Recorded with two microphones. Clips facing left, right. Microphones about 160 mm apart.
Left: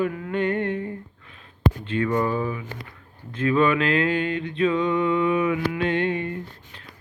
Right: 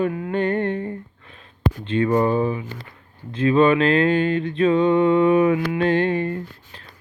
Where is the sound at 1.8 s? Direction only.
25° right (ahead or behind).